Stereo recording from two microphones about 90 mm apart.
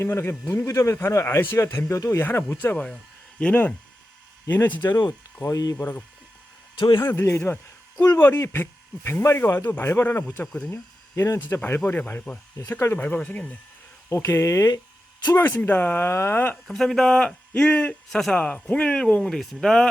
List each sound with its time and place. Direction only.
0.0 s speech: 30° left (ahead or behind)
0.4 s a man's voice: 40° left (ahead or behind)
2.7 s a man's voice: 10° left (ahead or behind)
5.5 s speech: 45° left (ahead or behind)
5.7 s speech: 20° left (ahead or behind)
6.7 s speech: 60° left (ahead or behind)
7.0 s speech: 25° left (ahead or behind)
10.4 s a man's voice: 5° left (ahead or behind)
10.7 s a man's voice: 30° left (ahead or behind); by 12.4 s 15° left (ahead or behind)
12.5 s a man's voice: 35° left (ahead or behind)
13.1 s a man's voice: 15° left (ahead or behind)
14.1 s a man's voice: 30° left (ahead or behind)
16.6 s a man's voice: 5° left (ahead or behind)